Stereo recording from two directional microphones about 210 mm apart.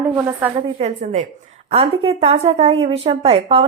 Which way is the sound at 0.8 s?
35° right (ahead or behind).